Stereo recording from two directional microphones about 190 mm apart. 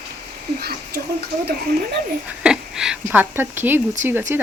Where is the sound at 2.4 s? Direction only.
5° right (ahead or behind).